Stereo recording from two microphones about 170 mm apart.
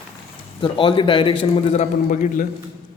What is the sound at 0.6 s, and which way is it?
A man's voice, 30° left (ahead or behind).